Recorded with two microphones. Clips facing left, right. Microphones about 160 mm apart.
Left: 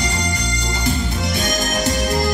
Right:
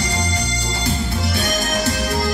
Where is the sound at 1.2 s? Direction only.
20° left (ahead or behind).